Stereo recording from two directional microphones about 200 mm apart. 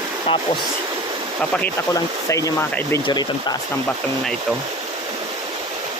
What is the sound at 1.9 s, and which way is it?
Speech, 15° left (ahead or behind).